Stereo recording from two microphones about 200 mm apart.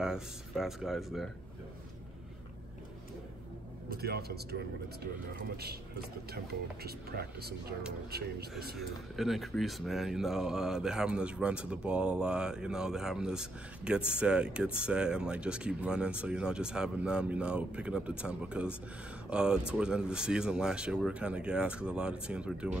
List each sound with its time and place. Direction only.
0.0 s speech: 5° right (ahead or behind)
3.9 s speech: 50° right (ahead or behind)
8.7 s speech: centre (ahead or behind)